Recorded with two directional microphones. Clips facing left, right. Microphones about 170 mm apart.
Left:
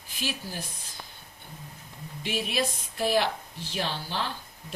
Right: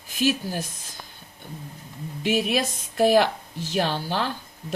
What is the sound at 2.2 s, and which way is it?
Speech, 45° right (ahead or behind).